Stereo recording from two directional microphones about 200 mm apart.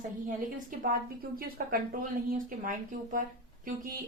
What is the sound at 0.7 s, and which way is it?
A woman's voice, 40° right (ahead or behind).